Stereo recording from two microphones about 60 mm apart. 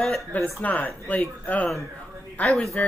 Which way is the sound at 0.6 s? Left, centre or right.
Left.